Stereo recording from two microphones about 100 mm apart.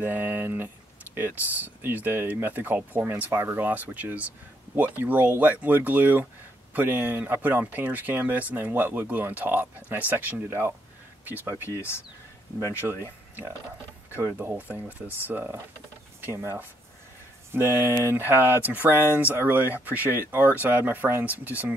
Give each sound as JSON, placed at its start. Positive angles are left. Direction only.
{"t": 0.0, "sound": "speech", "side_deg": -20}
{"t": 12.8, "sound": "speech", "side_deg": -20}
{"t": 14.1, "sound": "speech", "side_deg": -20}